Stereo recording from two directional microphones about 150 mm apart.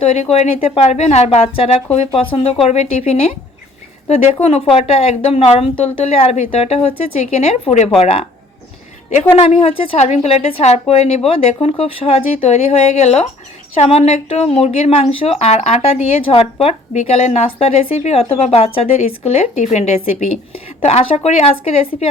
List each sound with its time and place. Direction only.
0.0 s a woman's voice: 45° left (ahead or behind)
4.4 s a woman's voice: 40° left (ahead or behind)
9.5 s speech: 40° left (ahead or behind)